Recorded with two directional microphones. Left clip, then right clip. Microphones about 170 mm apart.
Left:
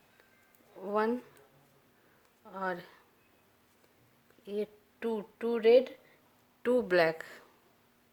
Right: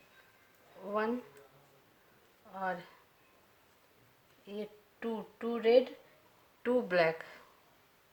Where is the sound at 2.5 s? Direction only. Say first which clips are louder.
Left 1 dB; 65° left (ahead or behind).